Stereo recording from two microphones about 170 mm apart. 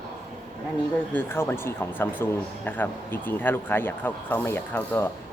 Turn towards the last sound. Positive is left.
turn(degrees=15)  # may be behind; listen again after turning